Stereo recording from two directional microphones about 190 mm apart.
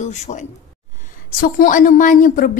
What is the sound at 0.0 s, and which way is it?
A woman's voice, 40° left (ahead or behind).